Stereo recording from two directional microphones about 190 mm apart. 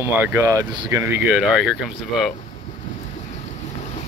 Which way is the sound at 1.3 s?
5° right (ahead or behind).